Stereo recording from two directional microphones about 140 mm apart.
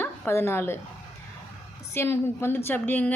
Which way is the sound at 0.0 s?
20° left (ahead or behind).